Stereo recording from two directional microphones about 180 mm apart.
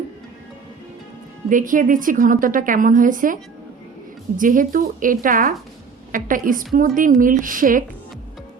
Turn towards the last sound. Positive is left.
turn(degrees=-50)  # may be behind; listen again after turning